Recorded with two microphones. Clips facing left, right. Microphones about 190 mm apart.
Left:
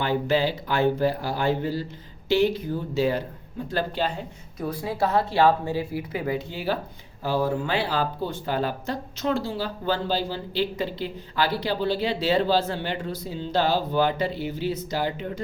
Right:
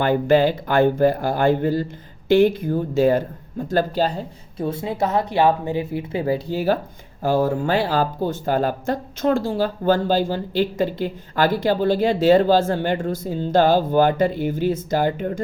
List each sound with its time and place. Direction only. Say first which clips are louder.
0.0 s speech: right 7 dB; 50° right (ahead or behind)